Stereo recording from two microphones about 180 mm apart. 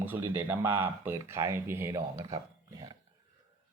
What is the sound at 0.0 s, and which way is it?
Speech, 10° right (ahead or behind).